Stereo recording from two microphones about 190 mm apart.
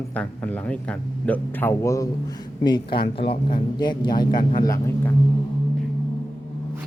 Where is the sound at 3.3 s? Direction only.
25° left (ahead or behind).